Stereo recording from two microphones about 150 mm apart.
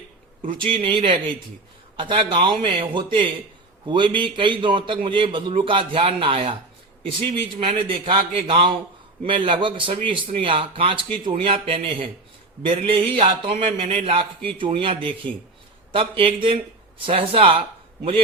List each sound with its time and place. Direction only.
0.6 s a man's voice: 35° right (ahead or behind)